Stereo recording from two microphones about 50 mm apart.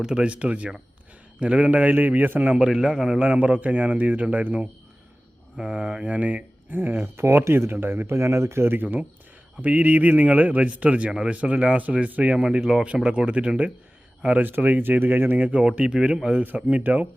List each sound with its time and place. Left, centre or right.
0.0 s a man's voice: centre
0.3 s speech: right
2.6 s a man's voice: centre
3.2 s speech: right
5.5 s a man's voice: centre
6.1 s speech: right
7.2 s speech: right
7.7 s speech: right
8.1 s speech: right
12.4 s speech: centre
14.4 s speech: right
15.7 s speech: centre
16.9 s speech: right